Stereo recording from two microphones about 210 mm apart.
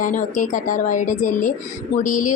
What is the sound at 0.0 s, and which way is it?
Speech, 35° left (ahead or behind).